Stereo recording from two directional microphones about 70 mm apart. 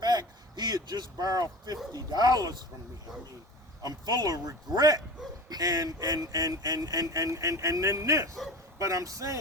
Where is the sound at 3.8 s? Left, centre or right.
Right.